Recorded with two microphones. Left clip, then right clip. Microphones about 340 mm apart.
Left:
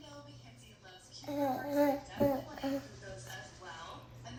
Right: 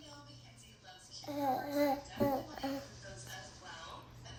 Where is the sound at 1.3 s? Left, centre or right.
Centre.